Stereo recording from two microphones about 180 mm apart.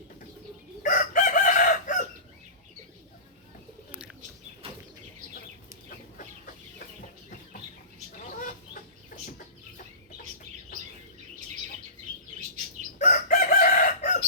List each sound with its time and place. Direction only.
0.8 s chicken: 45° left (ahead or behind)
6.1 s chicken: 50° left (ahead or behind)
8.4 s chicken: 50° left (ahead or behind)
13.0 s chicken: 45° left (ahead or behind)